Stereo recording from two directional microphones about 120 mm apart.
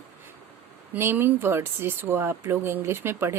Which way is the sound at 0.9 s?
20° right (ahead or behind).